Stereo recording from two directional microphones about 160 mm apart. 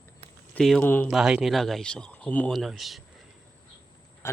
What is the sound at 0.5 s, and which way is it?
Speech, 5° left (ahead or behind).